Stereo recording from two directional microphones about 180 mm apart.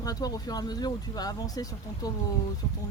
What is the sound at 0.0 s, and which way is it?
Speech, 20° left (ahead or behind).